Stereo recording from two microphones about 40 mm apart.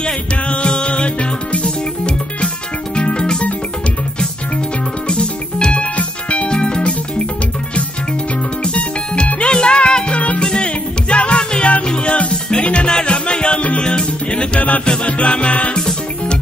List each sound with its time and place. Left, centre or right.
0.0 s music: left
5.0 s music: left
8.6 s music: left
15.8 s music: centre